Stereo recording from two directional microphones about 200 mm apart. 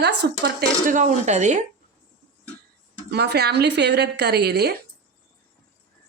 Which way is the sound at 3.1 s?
55° right (ahead or behind).